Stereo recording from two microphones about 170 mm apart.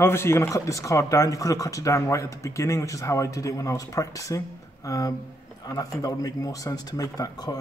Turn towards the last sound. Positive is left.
turn(degrees=25)  # may be behind; listen again after turning